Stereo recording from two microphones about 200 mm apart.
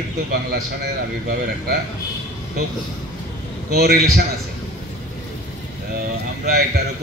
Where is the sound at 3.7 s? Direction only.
50° right (ahead or behind).